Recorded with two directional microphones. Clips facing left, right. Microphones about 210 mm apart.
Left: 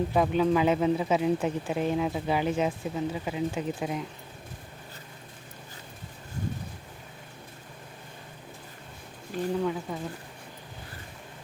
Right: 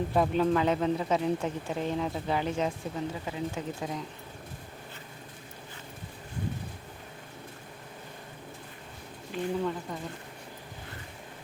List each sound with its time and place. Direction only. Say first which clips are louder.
0.1 s speech: even; centre (ahead or behind)
9.3 s speech: left 2 dB; 45° left (ahead or behind)
9.9 s speech: left 3 dB; 5° left (ahead or behind)